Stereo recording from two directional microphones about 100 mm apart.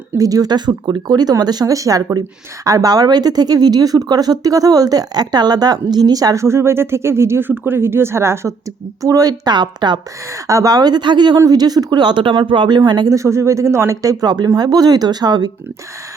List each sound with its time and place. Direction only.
0.2 s speech: 35° right (ahead or behind)
10.3 s speech: 35° right (ahead or behind)
13.1 s speech: 30° right (ahead or behind); by 15.4 s 45° right (ahead or behind)